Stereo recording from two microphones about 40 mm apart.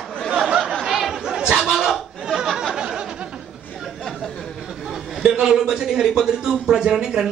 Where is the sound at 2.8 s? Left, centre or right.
Right.